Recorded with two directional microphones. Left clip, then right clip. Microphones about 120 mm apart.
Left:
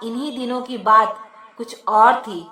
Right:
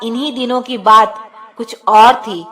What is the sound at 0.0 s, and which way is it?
A woman's voice, 30° right (ahead or behind).